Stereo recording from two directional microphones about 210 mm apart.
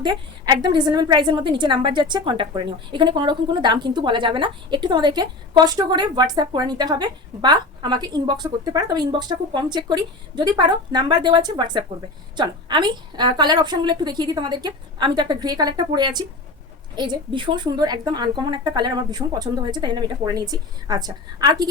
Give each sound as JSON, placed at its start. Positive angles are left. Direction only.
{"t": 0.0, "sound": "a woman's voice", "side_deg": -20}